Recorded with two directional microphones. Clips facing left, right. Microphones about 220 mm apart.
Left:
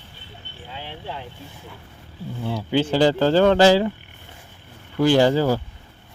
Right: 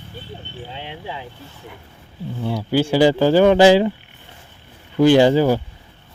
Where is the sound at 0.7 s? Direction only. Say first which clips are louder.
Even; 20° right (ahead or behind).